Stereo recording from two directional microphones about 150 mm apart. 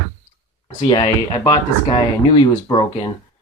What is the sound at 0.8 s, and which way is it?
Speech, 30° left (ahead or behind).